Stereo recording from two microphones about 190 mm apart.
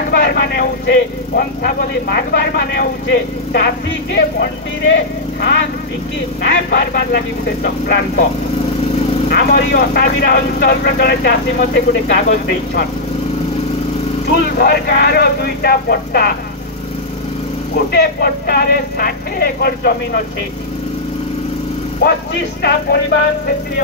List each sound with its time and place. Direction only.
0.1 s speech: 55° left (ahead or behind)
9.3 s speech: 55° left (ahead or behind)
14.2 s speech: 55° left (ahead or behind)
17.9 s speech: 55° left (ahead or behind)
22.0 s speech: 55° left (ahead or behind)